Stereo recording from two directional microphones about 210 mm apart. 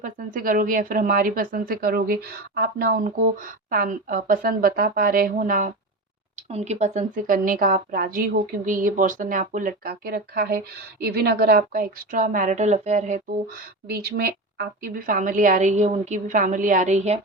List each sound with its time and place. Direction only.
0.0 s a woman's voice: 40° right (ahead or behind)
13.8 s a woman's voice: 50° right (ahead or behind)